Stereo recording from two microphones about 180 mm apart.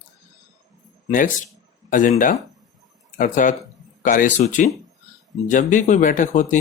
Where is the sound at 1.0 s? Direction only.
45° left (ahead or behind).